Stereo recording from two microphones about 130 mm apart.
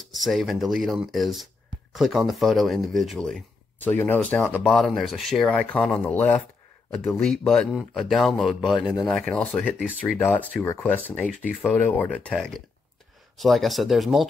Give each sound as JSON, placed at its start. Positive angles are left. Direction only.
{"t": 0.0, "sound": "speech", "side_deg": 0}
{"t": 3.8, "sound": "speech", "side_deg": 15}
{"t": 4.6, "sound": "speech", "side_deg": 5}
{"t": 9.8, "sound": "speech", "side_deg": -5}
{"t": 10.1, "sound": "speech", "side_deg": 15}